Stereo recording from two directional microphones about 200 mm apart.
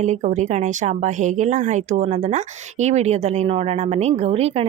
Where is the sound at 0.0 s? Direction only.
35° right (ahead or behind).